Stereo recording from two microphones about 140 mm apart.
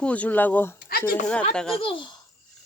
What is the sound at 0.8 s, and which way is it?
Speech, 90° left.